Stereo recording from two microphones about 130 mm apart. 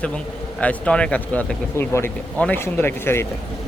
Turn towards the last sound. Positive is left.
turn(degrees=20)  # may be behind; listen again after turning